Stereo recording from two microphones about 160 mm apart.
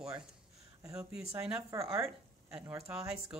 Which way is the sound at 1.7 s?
20° right (ahead or behind).